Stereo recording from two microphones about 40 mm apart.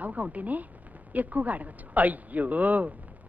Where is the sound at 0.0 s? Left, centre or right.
Right.